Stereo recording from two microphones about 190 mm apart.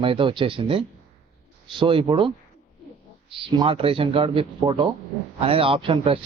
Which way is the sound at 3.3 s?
25° right (ahead or behind).